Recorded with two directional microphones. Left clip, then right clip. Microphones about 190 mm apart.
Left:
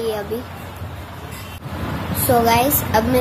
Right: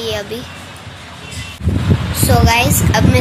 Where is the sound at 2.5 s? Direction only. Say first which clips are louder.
Right 2 dB; 15° left (ahead or behind).